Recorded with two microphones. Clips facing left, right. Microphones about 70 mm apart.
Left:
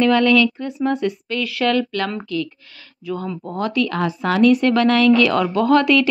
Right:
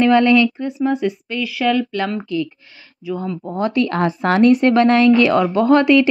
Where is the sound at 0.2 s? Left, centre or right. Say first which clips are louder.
Right 2 dB; centre.